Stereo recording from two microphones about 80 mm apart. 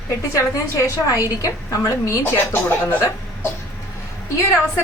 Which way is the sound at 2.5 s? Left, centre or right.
Left.